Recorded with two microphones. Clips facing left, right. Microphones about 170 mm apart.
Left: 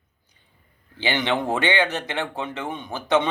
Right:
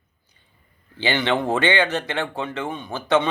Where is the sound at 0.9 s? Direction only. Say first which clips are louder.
Right 2 dB; 15° left (ahead or behind).